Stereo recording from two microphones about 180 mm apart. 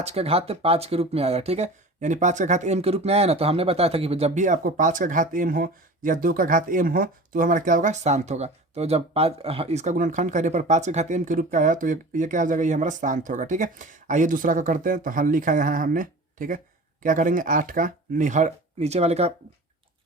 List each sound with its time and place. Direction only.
0.0 s speech: 35° right (ahead or behind)